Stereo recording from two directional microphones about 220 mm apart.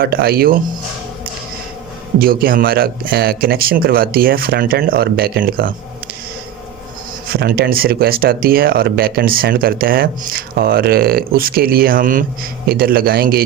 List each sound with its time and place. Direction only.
0.0 s speech: 45° right (ahead or behind)
2.1 s speech: 40° right (ahead or behind)
7.3 s speech: 45° right (ahead or behind)